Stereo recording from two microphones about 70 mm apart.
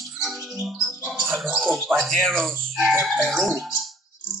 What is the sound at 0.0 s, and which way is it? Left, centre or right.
Music, centre.